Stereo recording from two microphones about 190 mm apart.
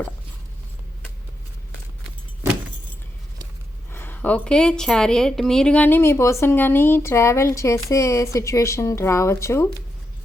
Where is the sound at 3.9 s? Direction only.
10° left (ahead or behind).